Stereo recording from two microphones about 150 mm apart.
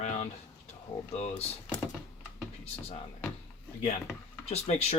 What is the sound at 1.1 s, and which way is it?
Speech, 45° left (ahead or behind).